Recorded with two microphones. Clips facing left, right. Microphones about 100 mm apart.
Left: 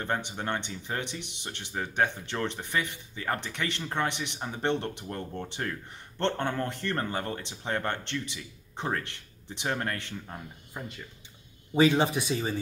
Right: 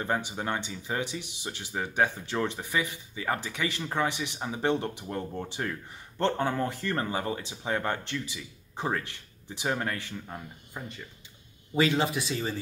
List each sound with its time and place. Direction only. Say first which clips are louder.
0.3 s speech: right 1 dB; 5° right (ahead or behind)
11.7 s speech: left 3 dB; 20° left (ahead or behind)